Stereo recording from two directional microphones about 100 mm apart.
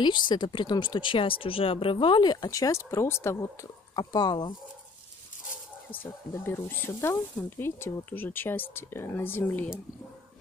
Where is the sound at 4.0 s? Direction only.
45° left (ahead or behind).